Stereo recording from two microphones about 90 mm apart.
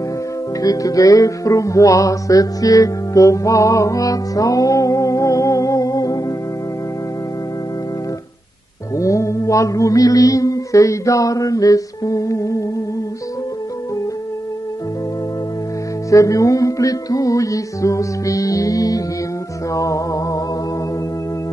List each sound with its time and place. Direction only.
0.6 s music: 40° left (ahead or behind)
8.9 s mantra: 35° left (ahead or behind)
16.1 s mantra: 40° left (ahead or behind)
19.7 s music: 35° left (ahead or behind)